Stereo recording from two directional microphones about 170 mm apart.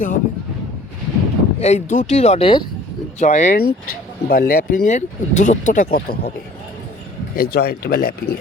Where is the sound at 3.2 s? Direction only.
45° left (ahead or behind).